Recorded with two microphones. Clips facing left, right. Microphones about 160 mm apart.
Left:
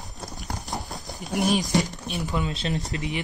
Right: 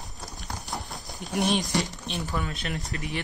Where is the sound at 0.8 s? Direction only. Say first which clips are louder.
Left 2 dB; centre (ahead or behind).